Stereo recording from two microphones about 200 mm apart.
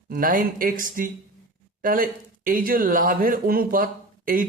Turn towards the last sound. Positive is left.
turn(degrees=-45)  # may be behind; listen again after turning